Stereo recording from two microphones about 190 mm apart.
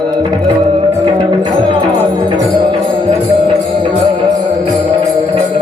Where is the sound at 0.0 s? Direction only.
25° right (ahead or behind).